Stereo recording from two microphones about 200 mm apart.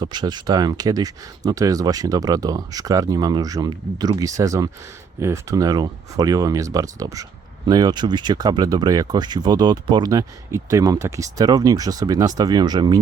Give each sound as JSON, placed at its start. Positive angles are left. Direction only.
{"t": 0.0, "sound": "speech", "side_deg": -20}